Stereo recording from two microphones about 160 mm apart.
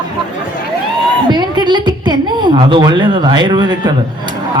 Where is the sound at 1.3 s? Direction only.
30° right (ahead or behind).